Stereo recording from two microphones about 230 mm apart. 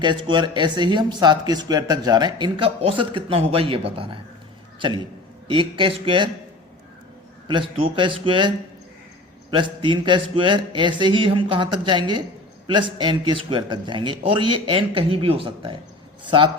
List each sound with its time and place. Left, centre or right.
0.0 s speech: centre
5.5 s speech: right
7.4 s a man's voice: right